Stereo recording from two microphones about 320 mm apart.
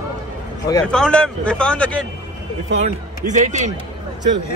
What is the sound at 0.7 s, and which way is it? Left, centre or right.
A man's voice, centre.